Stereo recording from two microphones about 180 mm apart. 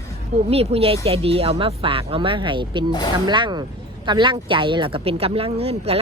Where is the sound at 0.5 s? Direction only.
35° right (ahead or behind).